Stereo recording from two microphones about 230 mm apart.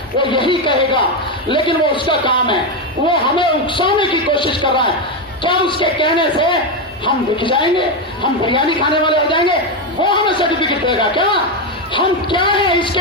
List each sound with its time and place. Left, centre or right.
0.2 s speech: left